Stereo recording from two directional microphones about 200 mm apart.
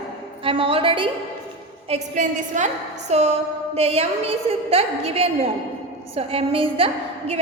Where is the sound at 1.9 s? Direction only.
35° right (ahead or behind).